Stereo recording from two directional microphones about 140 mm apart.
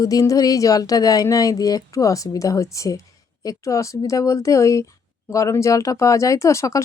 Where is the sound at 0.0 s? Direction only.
25° left (ahead or behind).